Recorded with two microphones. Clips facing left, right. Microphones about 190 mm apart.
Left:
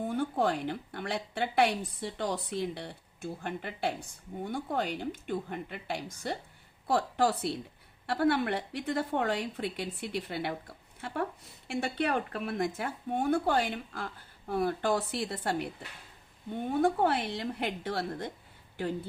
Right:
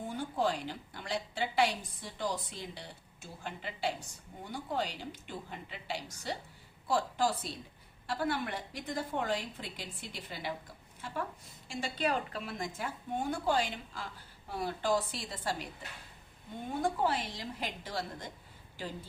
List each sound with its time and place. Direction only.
0.1 s a woman's voice: 60° left (ahead or behind)
16.8 s a woman's voice: 60° left (ahead or behind)